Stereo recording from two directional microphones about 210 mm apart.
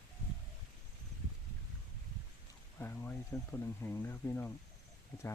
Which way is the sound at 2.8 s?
10° left (ahead or behind).